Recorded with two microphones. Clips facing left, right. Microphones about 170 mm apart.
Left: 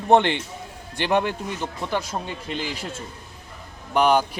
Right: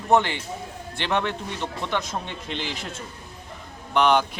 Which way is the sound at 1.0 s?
15° left (ahead or behind).